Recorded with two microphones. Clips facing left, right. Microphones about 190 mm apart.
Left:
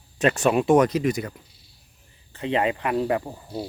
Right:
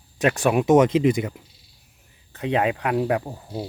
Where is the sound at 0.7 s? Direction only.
25° right (ahead or behind).